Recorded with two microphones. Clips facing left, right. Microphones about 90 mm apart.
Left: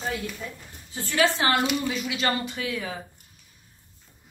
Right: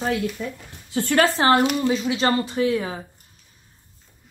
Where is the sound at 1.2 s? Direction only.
35° right (ahead or behind).